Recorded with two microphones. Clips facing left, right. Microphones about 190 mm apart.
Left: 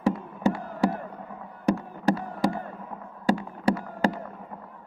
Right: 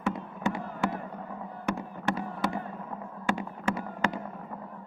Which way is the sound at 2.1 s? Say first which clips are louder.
Left 6 dB; 35° left (ahead or behind).